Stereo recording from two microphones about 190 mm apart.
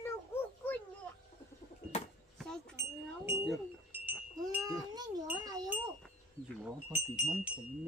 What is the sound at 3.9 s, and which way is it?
Wind chime, 10° right (ahead or behind).